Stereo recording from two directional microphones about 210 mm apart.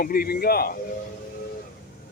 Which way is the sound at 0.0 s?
45° left (ahead or behind).